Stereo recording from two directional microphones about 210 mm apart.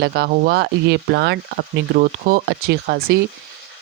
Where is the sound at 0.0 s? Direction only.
50° right (ahead or behind).